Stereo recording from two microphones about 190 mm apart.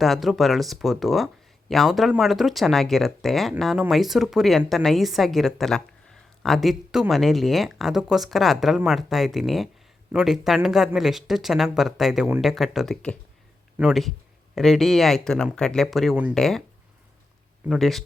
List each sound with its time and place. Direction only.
0.0 s speech: centre (ahead or behind)
17.7 s speech: centre (ahead or behind)